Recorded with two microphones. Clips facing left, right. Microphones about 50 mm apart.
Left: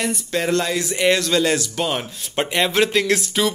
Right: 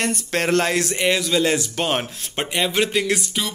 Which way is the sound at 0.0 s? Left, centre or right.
Right.